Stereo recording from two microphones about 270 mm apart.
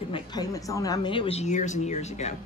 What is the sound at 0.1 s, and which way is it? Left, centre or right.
A man's voice, centre.